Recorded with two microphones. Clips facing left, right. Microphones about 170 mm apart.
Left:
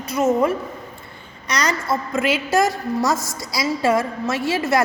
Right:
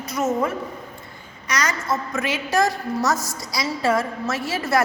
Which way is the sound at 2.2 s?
30° left (ahead or behind).